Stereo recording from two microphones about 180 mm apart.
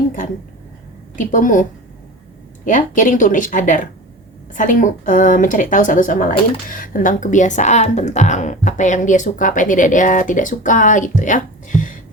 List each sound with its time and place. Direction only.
1.1 s a woman's voice: 45° left (ahead or behind)
2.6 s a woman's voice: 45° left (ahead or behind)